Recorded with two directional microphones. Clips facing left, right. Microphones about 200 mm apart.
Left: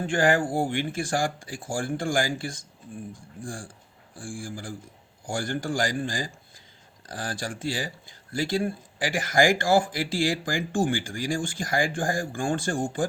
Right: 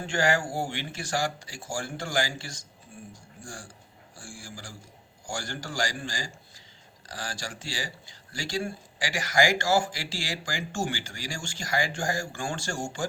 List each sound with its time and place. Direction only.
0.0 s speech: 50° left (ahead or behind)